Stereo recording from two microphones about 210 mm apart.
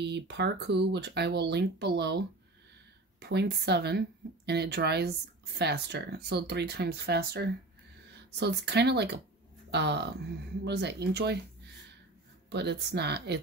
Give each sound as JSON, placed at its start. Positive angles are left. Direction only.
{"t": 0.0, "sound": "speech", "side_deg": -55}
{"t": 12.4, "sound": "speech", "side_deg": -50}